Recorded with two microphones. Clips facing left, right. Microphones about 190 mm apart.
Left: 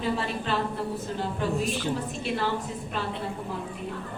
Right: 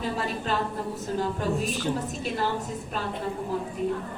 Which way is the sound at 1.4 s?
40° right (ahead or behind).